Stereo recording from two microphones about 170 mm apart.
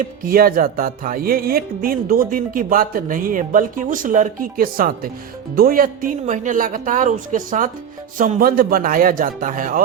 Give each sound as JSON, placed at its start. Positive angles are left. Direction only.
{"t": 0.0, "sound": "music", "side_deg": -60}
{"t": 5.5, "sound": "speech", "side_deg": -60}
{"t": 8.2, "sound": "music", "side_deg": -55}